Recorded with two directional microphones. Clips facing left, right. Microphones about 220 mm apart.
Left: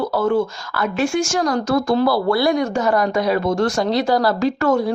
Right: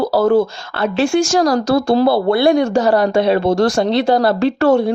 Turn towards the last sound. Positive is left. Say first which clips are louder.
# right 5 dB
turn(degrees=-30)  # may be behind; listen again after turning